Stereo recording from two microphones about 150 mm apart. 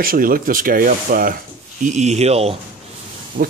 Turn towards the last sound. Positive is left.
turn(degrees=-35)  # may be behind; listen again after turning